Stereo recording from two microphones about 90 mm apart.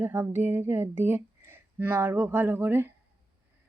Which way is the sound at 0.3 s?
25° right (ahead or behind).